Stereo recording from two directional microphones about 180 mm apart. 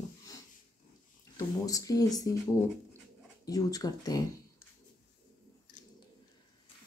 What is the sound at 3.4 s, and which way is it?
Speech, 20° left (ahead or behind).